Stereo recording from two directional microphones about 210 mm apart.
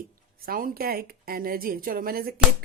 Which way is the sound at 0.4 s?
45° right (ahead or behind).